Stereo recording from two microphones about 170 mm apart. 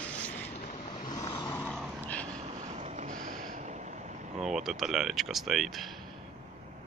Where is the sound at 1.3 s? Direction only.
20° left (ahead or behind).